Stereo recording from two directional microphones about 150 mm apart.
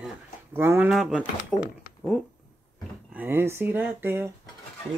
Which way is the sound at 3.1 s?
15° right (ahead or behind).